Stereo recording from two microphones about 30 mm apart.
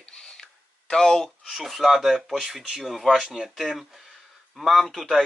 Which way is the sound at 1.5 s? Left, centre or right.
Centre.